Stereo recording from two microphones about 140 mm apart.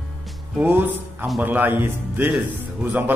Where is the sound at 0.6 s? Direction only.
15° right (ahead or behind).